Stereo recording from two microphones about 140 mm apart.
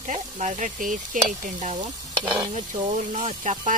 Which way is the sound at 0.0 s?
55° right (ahead or behind).